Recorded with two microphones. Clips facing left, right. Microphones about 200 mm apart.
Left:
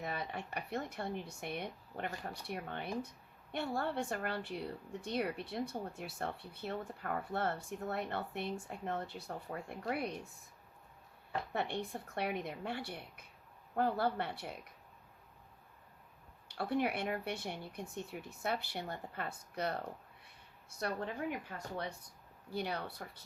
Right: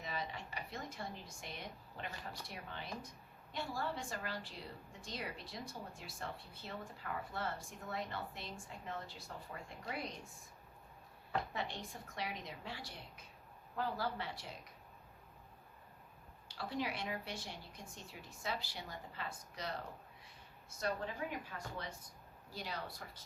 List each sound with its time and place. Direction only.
0.0 s a woman's voice: 60° left (ahead or behind)
11.5 s a woman's voice: 60° left (ahead or behind)
16.5 s a woman's voice: 60° left (ahead or behind)
22.5 s a woman's voice: 60° left (ahead or behind)